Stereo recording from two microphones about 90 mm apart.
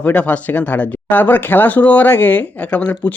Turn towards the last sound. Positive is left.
turn(degrees=15)  # may be behind; listen again after turning